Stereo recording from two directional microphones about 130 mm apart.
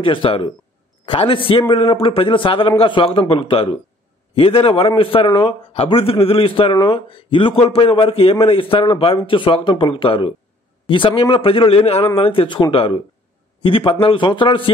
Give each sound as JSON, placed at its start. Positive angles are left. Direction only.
{"t": 0.0, "sound": "a man's voice", "side_deg": 40}